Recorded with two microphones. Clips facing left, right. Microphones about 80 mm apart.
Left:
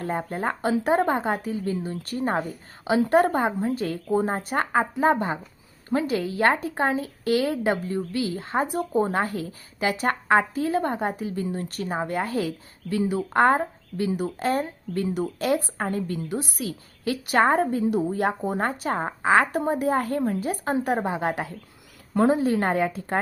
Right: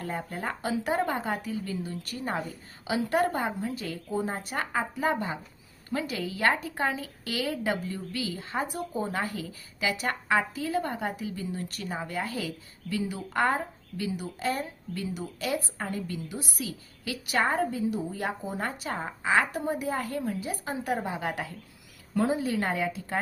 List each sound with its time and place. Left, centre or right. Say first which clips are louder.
0.0 s speech: left 6 dB; left
22.1 s speech: left 6 dB; left